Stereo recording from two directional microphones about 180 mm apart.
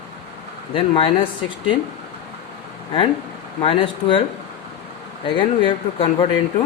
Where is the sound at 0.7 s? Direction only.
30° left (ahead or behind).